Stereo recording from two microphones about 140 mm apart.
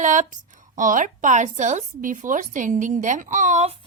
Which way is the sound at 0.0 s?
65° right (ahead or behind).